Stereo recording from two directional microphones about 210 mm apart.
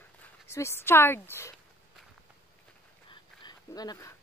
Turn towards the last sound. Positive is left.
turn(degrees=20)  # may be behind; listen again after turning